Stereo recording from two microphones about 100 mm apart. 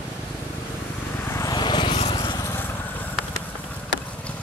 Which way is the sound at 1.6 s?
50° left (ahead or behind).